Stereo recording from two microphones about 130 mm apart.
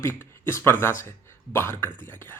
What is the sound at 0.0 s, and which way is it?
A man's voice, 15° left (ahead or behind).